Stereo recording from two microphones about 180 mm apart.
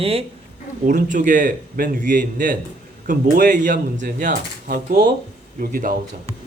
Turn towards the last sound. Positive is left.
turn(degrees=-50)  # may be behind; listen again after turning